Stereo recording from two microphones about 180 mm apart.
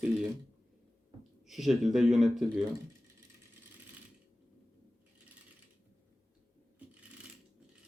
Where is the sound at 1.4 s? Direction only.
Centre (ahead or behind).